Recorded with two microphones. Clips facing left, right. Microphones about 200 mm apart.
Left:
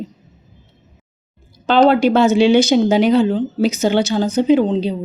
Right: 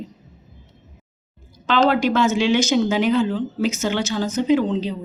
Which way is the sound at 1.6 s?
40° left (ahead or behind).